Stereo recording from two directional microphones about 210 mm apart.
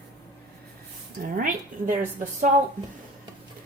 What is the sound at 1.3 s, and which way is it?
Speech, 40° right (ahead or behind).